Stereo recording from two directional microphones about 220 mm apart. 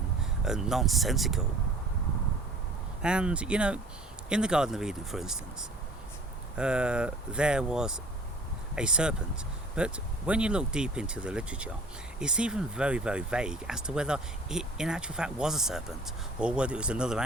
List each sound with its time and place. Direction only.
0.4 s speech: centre (ahead or behind)
3.0 s speech: 5° right (ahead or behind)